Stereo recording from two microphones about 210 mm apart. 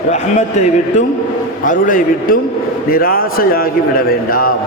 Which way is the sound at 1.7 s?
40° left (ahead or behind).